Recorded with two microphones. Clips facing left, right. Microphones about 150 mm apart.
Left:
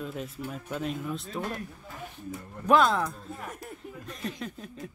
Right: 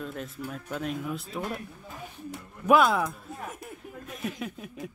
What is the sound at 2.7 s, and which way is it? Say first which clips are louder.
Speech: right 1 dB; 10° right (ahead or behind).